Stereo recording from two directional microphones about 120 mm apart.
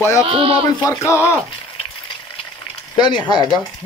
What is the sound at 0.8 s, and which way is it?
Speech, 25° left (ahead or behind).